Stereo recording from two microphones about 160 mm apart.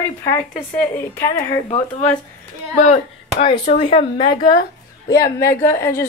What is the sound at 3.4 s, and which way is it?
Speech, 35° left (ahead or behind).